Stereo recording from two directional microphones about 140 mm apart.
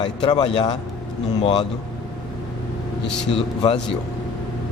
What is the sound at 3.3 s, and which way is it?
Speech, 40° left (ahead or behind).